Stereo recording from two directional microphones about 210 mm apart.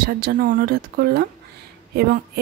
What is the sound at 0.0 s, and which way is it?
Speech, 45° right (ahead or behind).